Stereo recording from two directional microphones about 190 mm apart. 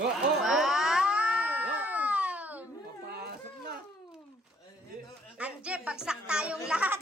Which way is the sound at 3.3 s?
55° right (ahead or behind).